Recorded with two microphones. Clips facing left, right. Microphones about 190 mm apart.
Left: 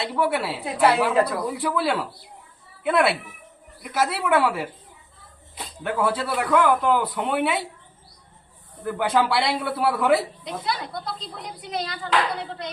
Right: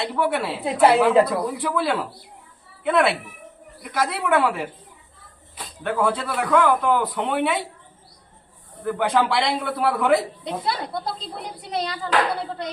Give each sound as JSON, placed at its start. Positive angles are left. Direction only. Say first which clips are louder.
{"t": 0.2, "sound": "a man's voice", "louder": "even", "side_deg": 5}
{"t": 0.6, "sound": "a woman's voice", "louder": "right 4 dB", "side_deg": -25}
{"t": 1.5, "sound": "a man's voice", "louder": "even", "side_deg": 0}
{"t": 5.8, "sound": "a man's voice", "louder": "right 1 dB", "side_deg": 5}
{"t": 8.8, "sound": "a man's voice", "louder": "right 1 dB", "side_deg": 0}
{"t": 10.4, "sound": "speech", "louder": "right 3 dB", "side_deg": -30}